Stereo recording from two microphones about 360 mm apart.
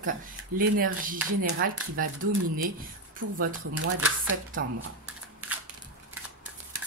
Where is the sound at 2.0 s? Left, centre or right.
Right.